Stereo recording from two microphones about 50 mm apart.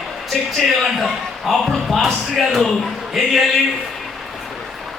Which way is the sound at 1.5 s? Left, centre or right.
Centre.